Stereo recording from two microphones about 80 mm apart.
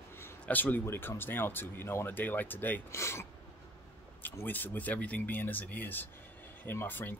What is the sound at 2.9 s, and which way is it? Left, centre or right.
Speech, left.